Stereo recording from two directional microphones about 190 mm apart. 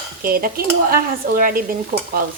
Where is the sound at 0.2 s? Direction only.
50° right (ahead or behind).